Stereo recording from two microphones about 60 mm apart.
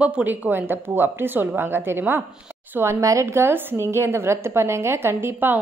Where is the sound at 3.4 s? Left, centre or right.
Right.